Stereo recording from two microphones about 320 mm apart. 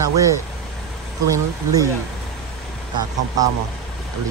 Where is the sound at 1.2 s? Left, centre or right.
Centre.